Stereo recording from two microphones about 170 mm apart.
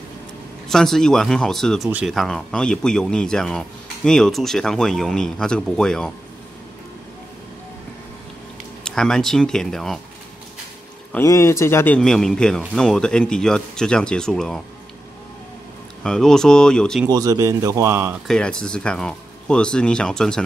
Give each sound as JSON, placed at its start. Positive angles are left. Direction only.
{"t": 0.7, "sound": "speech", "side_deg": 0}
{"t": 8.8, "sound": "speech", "side_deg": 5}
{"t": 11.2, "sound": "speech", "side_deg": 15}
{"t": 16.0, "sound": "speech", "side_deg": 5}
{"t": 17.1, "sound": "speech", "side_deg": -20}
{"t": 18.2, "sound": "speech", "side_deg": 5}